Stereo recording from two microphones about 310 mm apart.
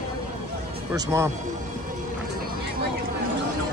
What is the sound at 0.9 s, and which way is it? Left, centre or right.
Speech, centre.